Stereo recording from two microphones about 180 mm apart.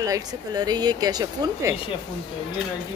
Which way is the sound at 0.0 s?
20° right (ahead or behind).